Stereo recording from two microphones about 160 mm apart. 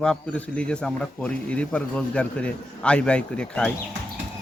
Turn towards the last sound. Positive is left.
turn(degrees=5)  # may be behind; listen again after turning